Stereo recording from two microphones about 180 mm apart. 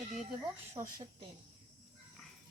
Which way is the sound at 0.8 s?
20° right (ahead or behind).